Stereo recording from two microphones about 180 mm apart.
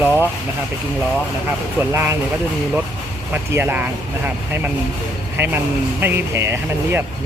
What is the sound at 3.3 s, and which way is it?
Speech, 15° right (ahead or behind).